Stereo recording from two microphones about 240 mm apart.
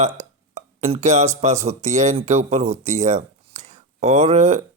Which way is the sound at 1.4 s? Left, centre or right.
Right.